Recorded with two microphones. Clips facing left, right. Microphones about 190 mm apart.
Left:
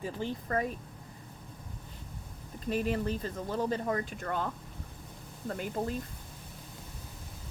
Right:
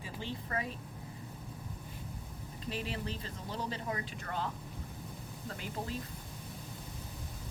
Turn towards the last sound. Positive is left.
turn(degrees=50)  # may be behind; listen again after turning